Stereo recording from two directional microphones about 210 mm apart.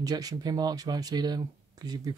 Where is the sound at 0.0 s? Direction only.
20° right (ahead or behind).